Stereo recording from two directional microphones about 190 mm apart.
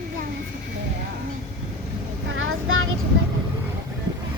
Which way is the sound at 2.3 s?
90° right.